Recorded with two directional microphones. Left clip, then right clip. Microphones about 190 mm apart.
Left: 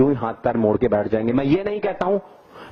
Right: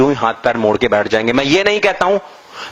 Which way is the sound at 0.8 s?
15° right (ahead or behind).